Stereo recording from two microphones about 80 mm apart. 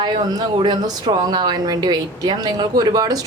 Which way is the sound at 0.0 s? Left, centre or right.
Right.